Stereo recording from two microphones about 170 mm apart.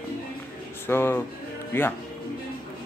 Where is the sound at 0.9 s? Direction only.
15° left (ahead or behind).